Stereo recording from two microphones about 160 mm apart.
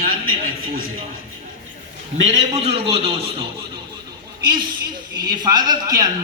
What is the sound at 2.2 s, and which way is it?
A man's voice, 45° right (ahead or behind).